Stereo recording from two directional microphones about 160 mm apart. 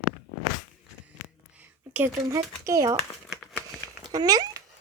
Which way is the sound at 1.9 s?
15° right (ahead or behind).